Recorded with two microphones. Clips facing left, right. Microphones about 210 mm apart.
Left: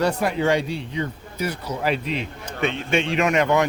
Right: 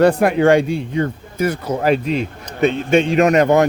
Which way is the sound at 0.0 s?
55° right (ahead or behind).